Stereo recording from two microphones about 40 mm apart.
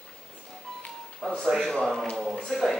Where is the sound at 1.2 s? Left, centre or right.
Centre.